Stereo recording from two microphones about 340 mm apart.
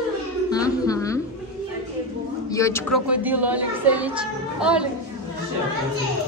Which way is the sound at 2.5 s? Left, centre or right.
Centre.